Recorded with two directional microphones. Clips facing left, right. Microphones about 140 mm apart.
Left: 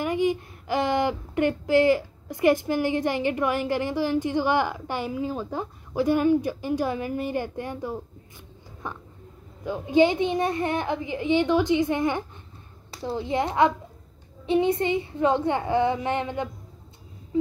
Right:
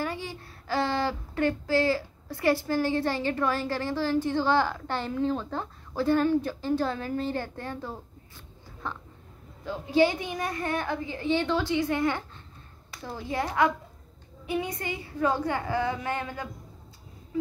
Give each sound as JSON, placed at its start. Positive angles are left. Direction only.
{"t": 0.0, "sound": "a woman's voice", "side_deg": 15}